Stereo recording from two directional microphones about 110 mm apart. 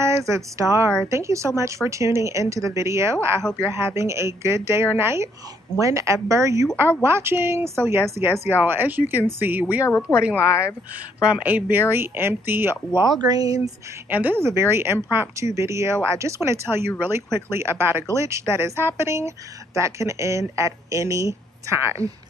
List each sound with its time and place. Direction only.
0.0 s a woman's voice: 25° right (ahead or behind); by 10.3 s 10° right (ahead or behind)
10.3 s speech: 30° left (ahead or behind)
11.2 s a woman's voice: 15° right (ahead or behind)
13.3 s speech: 35° right (ahead or behind)
14.1 s a woman's voice: 20° right (ahead or behind)